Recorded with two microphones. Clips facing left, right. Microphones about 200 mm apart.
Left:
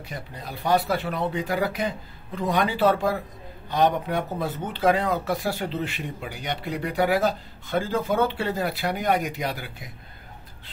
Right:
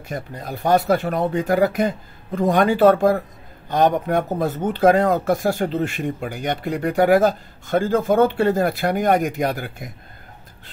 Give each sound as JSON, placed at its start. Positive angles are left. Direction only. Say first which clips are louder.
{"t": 0.1, "sound": "speech", "louder": "right 8 dB", "side_deg": -50}